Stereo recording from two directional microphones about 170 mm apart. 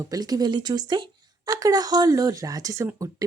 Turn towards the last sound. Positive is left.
turn(degrees=-20)  # may be behind; listen again after turning